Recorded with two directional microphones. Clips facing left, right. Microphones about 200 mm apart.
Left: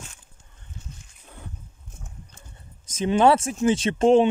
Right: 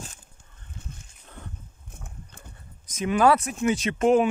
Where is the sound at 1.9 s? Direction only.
60° right (ahead or behind).